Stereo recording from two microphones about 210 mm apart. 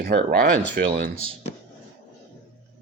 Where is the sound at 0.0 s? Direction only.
45° right (ahead or behind).